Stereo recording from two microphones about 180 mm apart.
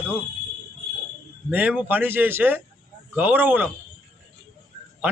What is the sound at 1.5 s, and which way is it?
A man's voice, 10° right (ahead or behind).